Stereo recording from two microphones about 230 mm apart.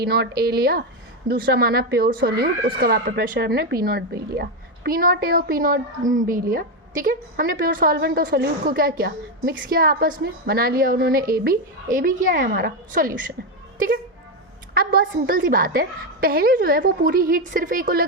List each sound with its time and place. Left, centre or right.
0.0 s speech: right